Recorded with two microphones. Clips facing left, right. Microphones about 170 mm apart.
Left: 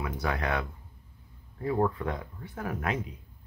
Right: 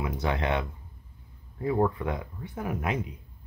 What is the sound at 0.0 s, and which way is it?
Speech, 25° right (ahead or behind).